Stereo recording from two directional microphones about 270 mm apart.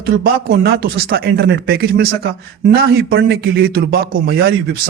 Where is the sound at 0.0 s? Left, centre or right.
Right.